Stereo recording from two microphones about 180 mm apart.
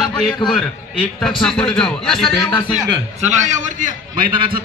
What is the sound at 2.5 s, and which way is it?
Speech, 25° left (ahead or behind).